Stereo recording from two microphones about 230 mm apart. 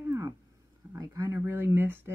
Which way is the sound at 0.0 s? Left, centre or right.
Centre.